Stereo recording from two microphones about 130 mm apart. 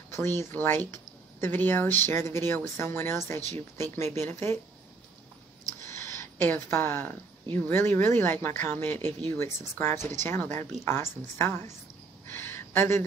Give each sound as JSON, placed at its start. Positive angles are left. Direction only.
{"t": 0.1, "sound": "speech", "side_deg": 20}
{"t": 6.4, "sound": "speech", "side_deg": 15}
{"t": 12.3, "sound": "a sound", "side_deg": 20}